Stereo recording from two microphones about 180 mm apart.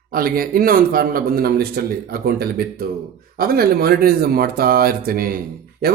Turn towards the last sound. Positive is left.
turn(degrees=-55)  # may be behind; listen again after turning